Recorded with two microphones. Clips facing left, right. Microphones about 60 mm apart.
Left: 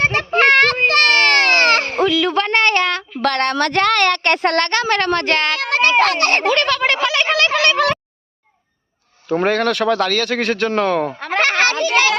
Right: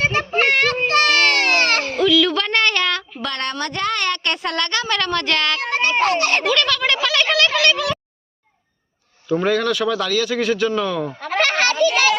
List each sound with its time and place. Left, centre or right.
0.0 s a sound: left
3.2 s a woman's voice: left
5.5 s a child's voice: left
6.4 s a woman's voice: left
9.3 s a woman's voice: left
11.3 s a sound: left